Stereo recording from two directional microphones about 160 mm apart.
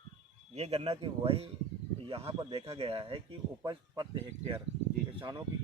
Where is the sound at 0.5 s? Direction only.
40° right (ahead or behind).